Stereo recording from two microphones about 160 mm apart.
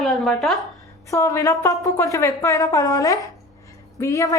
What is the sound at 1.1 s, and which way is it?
A woman's voice, 20° left (ahead or behind).